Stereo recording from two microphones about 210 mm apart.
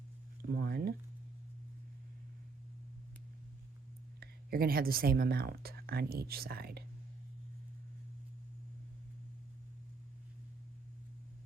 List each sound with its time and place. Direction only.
0.4 s speech: 45° right (ahead or behind)
4.2 s speech: 45° right (ahead or behind)